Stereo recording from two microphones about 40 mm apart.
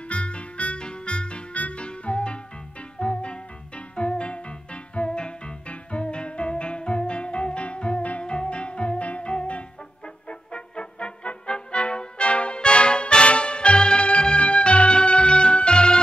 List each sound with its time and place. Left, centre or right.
0.1 s music: left